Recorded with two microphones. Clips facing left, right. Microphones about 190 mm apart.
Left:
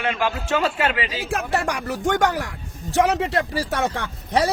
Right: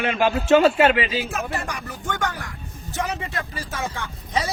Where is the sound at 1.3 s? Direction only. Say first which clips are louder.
Left 5 dB; 75° left (ahead or behind).